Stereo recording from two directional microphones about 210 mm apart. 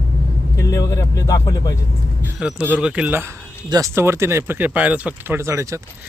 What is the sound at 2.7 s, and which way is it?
Speech, 5° right (ahead or behind).